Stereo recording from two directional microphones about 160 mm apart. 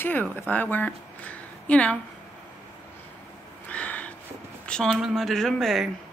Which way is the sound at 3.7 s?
10° left (ahead or behind).